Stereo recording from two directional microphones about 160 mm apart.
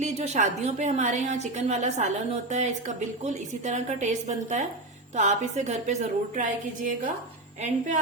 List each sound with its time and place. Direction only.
0.0 s a woman's voice: 50° right (ahead or behind)